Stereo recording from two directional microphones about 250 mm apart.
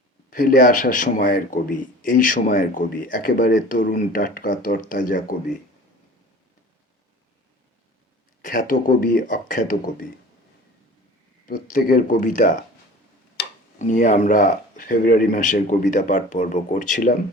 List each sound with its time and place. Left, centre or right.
0.3 s speech: left
8.4 s speech: left
11.4 s speech: left
13.7 s speech: left